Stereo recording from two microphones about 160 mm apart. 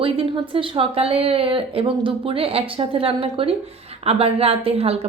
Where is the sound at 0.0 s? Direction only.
35° right (ahead or behind).